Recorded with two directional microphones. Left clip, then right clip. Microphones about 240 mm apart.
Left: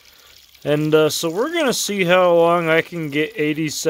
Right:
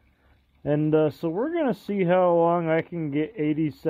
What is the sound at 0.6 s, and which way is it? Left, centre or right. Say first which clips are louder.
Speech: left 6 dB; left.